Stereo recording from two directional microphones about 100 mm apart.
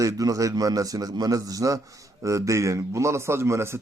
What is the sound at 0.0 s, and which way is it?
A man's voice, 35° right (ahead or behind).